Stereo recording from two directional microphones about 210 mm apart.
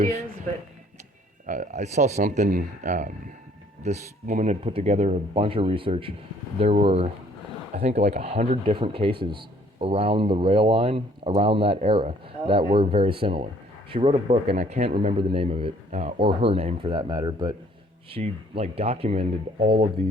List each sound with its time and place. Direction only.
1.5 s speech: 35° right (ahead or behind)